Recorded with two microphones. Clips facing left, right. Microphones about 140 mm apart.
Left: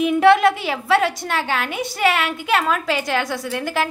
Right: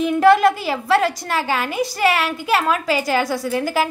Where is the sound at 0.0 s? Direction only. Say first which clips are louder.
Even; 5° left (ahead or behind).